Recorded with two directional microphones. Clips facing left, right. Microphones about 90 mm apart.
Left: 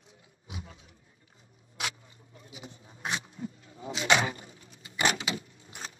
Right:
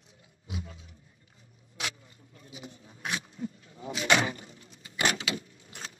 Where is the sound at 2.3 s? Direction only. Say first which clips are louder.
Right 1 dB; 20° left (ahead or behind).